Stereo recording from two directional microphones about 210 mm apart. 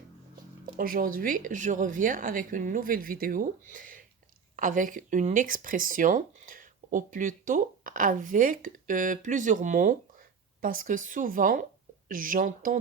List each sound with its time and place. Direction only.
0.6 s speech: 40° right (ahead or behind)